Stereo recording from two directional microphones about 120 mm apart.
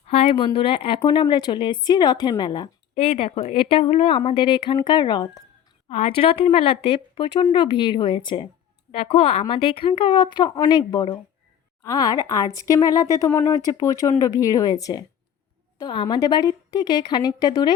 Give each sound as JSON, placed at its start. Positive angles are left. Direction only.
{"t": 0.1, "sound": "a woman's voice", "side_deg": 50}
{"t": 2.9, "sound": "a woman's voice", "side_deg": 55}
{"t": 5.9, "sound": "a woman's voice", "side_deg": 55}
{"t": 8.9, "sound": "a woman's voice", "side_deg": 55}
{"t": 11.8, "sound": "a woman's voice", "side_deg": 30}